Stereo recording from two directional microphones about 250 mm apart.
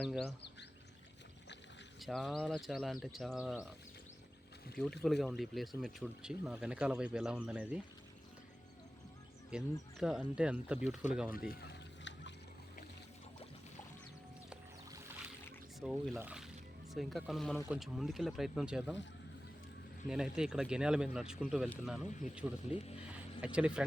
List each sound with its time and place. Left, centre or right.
0.0 s speech: centre
2.0 s speech: centre
5.0 s speech: centre
9.5 s speech: centre
10.8 s speech: left
11.3 s a sound: left
15.8 s speech: centre
20.1 s speech: centre